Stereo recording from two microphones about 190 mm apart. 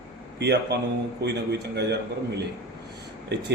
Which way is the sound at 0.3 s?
60° right (ahead or behind).